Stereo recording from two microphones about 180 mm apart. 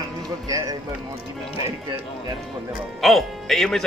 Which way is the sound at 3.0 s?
Centre (ahead or behind).